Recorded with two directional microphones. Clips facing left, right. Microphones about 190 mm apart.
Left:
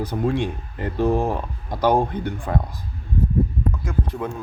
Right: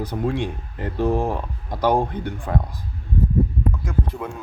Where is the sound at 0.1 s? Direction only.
Centre (ahead or behind).